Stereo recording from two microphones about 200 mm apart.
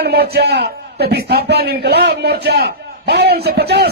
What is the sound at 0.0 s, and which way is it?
A man's voice, 55° right (ahead or behind).